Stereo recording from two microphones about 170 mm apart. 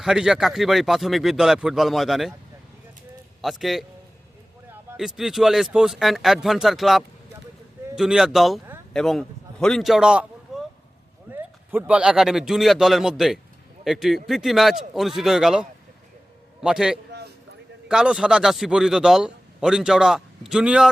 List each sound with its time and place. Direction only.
0.0 s a man's voice: 5° right (ahead or behind)
3.4 s a man's voice: centre (ahead or behind)
4.9 s a man's voice: centre (ahead or behind)
16.6 s a man's voice: 5° right (ahead or behind)
17.1 s a sound: 70° right (ahead or behind)
17.8 s a man's voice: 5° right (ahead or behind)